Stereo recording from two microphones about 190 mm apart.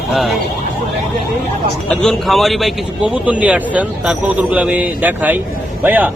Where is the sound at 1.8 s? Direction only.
Centre (ahead or behind).